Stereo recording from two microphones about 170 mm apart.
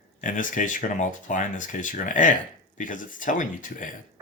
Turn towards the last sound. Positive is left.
turn(degrees=50)  # may be behind; listen again after turning